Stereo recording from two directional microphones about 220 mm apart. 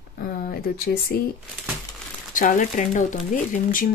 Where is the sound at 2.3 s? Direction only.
35° left (ahead or behind).